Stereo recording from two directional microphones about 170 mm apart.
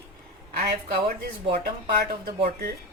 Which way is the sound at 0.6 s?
65° right (ahead or behind).